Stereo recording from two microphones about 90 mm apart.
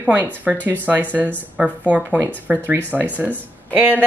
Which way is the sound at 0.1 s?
20° right (ahead or behind).